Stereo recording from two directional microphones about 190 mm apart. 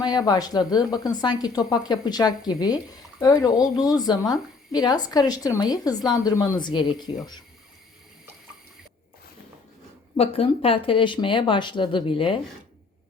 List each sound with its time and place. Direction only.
0.0 s a woman's voice: 20° left (ahead or behind)
10.2 s a woman's voice: 30° left (ahead or behind)